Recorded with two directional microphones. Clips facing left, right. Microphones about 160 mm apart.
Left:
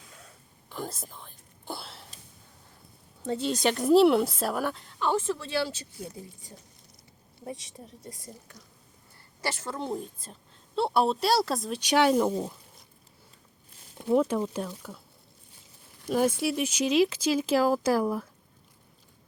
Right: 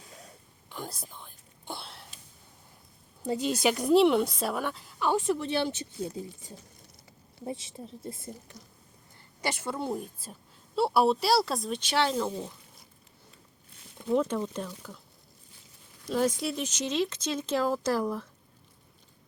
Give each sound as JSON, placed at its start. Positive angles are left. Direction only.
{"t": 0.1, "sound": "whispering", "side_deg": -40}
{"t": 0.7, "sound": "whispering", "side_deg": 0}
{"t": 3.4, "sound": "a woman's voice", "side_deg": -5}
{"t": 7.4, "sound": "a woman's voice", "side_deg": -25}
{"t": 9.4, "sound": "a woman's voice", "side_deg": -15}
{"t": 11.8, "sound": "speech", "side_deg": 10}
{"t": 14.2, "sound": "speech", "side_deg": 10}
{"t": 16.0, "sound": "speech", "side_deg": 10}